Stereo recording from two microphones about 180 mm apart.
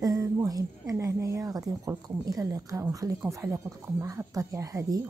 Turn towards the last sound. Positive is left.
turn(degrees=-20)  # may be behind; listen again after turning